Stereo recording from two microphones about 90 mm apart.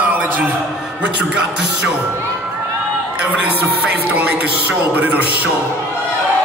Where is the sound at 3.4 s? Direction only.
15° right (ahead or behind).